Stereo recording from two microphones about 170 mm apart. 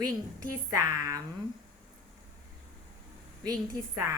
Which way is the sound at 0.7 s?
20° right (ahead or behind).